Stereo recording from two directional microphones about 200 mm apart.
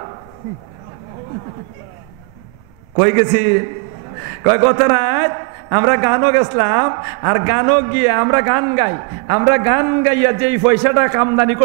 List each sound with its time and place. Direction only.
3.0 s a man's voice: 15° right (ahead or behind)